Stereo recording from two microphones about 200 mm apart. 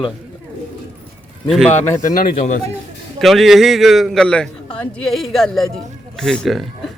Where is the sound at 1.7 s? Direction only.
45° left (ahead or behind).